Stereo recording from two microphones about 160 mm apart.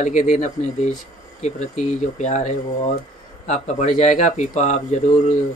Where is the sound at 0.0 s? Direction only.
50° left (ahead or behind).